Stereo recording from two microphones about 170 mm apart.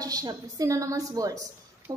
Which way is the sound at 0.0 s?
20° right (ahead or behind).